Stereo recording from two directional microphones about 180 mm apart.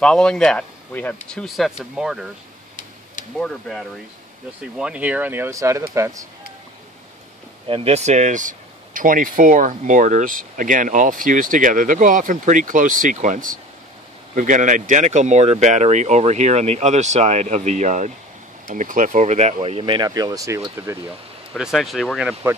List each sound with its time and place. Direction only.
0.0 s speech: 5° left (ahead or behind)
3.3 s speech: 5° left (ahead or behind); by 6.2 s 15° right (ahead or behind)
7.6 s speech: 35° right (ahead or behind); by 21.0 s 15° right (ahead or behind)
21.5 s speech: centre (ahead or behind)